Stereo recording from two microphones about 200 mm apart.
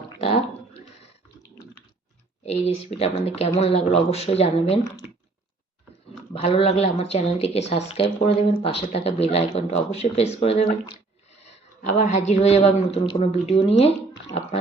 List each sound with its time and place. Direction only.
0.2 s a sound: 30° left (ahead or behind)
2.4 s speech: 30° left (ahead or behind)
6.3 s speech: 30° left (ahead or behind)
11.9 s speech: 35° left (ahead or behind)